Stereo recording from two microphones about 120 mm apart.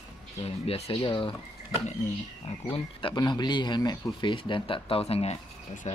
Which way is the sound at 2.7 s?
40° left (ahead or behind).